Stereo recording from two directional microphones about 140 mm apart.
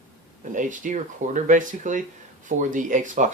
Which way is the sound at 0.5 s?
65° right (ahead or behind).